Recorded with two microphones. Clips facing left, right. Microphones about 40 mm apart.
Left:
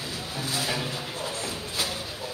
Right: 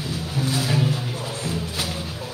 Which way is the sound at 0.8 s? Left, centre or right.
Right.